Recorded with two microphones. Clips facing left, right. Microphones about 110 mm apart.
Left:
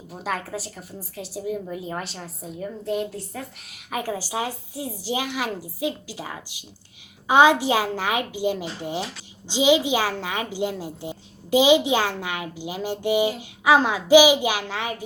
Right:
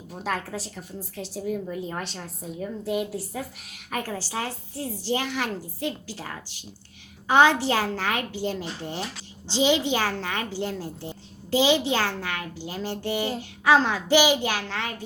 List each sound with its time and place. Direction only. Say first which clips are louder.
0.1 s a woman's voice: left 1 dB; 5° left (ahead or behind)
3.9 s a child's voice: left 3 dB; 10° left (ahead or behind)